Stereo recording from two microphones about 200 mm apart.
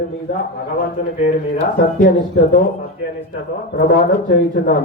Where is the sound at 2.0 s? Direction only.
40° left (ahead or behind).